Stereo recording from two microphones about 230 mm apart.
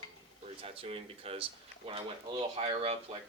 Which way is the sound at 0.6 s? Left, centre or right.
Right.